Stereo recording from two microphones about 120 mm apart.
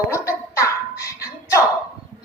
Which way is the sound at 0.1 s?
25° left (ahead or behind).